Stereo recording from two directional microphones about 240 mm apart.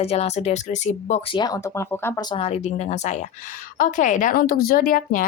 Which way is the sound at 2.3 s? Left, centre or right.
Left.